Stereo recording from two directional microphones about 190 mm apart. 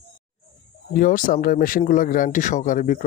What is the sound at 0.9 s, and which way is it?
A man's voice, 45° left (ahead or behind).